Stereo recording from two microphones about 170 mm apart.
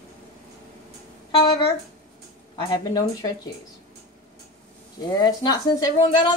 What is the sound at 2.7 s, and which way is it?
Speech, 25° left (ahead or behind).